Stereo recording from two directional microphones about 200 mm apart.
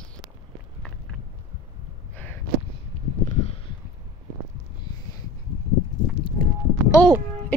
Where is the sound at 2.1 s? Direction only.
10° left (ahead or behind).